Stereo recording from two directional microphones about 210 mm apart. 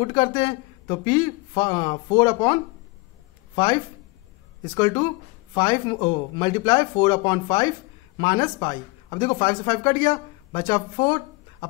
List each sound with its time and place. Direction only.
0.0 s speech: 20° left (ahead or behind)
4.6 s speech: 20° left (ahead or behind)